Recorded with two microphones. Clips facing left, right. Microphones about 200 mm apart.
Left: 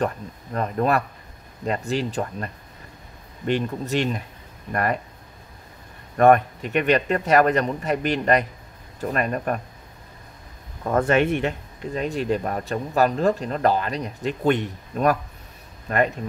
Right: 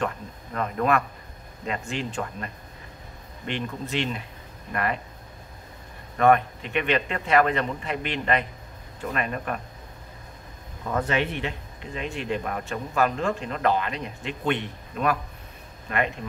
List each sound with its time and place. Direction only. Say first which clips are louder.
0.0 s speech: left 4 dB; 35° left (ahead or behind)
6.1 s speech: left 4 dB; 45° left (ahead or behind)
10.9 s speech: left 6 dB; 50° left (ahead or behind)